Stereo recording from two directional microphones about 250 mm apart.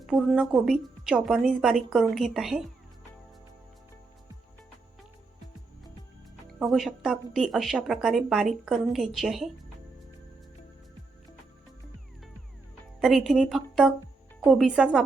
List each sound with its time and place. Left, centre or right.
0.0 s a woman's voice: centre
6.5 s a woman's voice: centre
13.0 s a woman's voice: centre